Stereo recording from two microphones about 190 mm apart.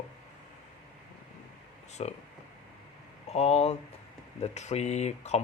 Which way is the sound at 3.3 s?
35° left (ahead or behind).